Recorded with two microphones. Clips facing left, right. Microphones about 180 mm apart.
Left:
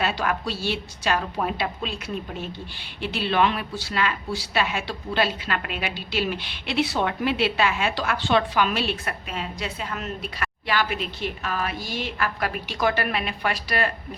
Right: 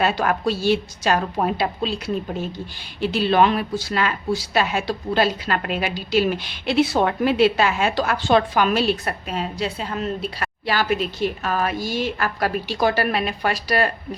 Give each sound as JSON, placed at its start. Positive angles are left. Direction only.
{"t": 0.0, "sound": "a woman's voice", "side_deg": -45}